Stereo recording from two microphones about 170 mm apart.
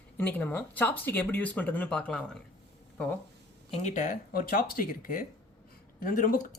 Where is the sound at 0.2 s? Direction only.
10° left (ahead or behind).